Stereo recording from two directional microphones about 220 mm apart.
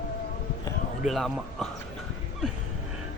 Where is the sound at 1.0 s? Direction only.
Centre (ahead or behind).